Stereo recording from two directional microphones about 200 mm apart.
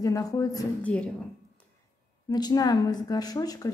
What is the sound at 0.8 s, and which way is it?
Speech, 5° left (ahead or behind).